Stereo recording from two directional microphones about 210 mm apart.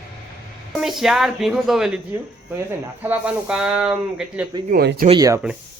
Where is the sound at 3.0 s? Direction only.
5° right (ahead or behind).